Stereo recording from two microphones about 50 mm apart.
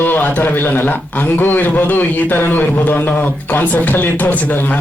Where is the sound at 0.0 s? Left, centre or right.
Left.